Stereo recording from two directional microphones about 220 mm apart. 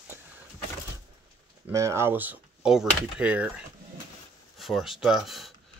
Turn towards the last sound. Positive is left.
turn(degrees=0)  # may be behind; listen again after turning